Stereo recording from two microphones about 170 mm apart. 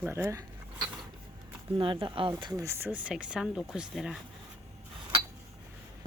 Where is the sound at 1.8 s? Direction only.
30° right (ahead or behind); by 4.2 s 5° right (ahead or behind).